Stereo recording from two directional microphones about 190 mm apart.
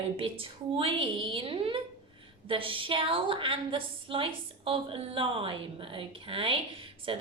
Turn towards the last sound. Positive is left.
turn(degrees=-30)  # may be behind; listen again after turning